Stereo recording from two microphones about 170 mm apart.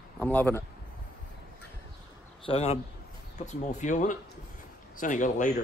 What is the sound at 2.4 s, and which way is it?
A man's voice, 40° left (ahead or behind).